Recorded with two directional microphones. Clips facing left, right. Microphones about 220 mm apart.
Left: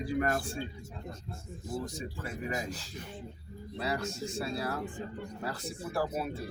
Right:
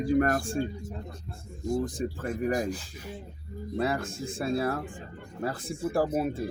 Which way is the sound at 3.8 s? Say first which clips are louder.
Right 4 dB; 50° right (ahead or behind).